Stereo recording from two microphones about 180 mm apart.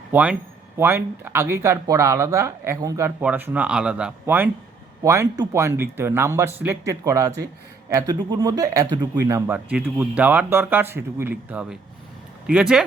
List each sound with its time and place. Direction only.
0.1 s speech: 10° right (ahead or behind)